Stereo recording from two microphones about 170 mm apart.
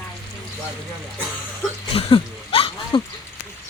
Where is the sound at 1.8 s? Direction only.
30° left (ahead or behind).